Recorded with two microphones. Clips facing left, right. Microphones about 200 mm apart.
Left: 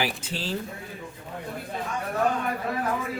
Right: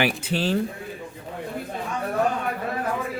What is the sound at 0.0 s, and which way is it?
Speech, 65° right (ahead or behind).